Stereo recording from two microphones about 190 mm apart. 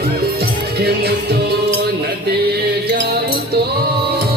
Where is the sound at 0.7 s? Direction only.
55° right (ahead or behind).